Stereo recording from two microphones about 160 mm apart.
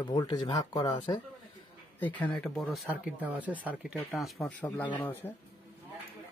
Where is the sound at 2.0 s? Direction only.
10° left (ahead or behind); by 3.9 s 10° right (ahead or behind).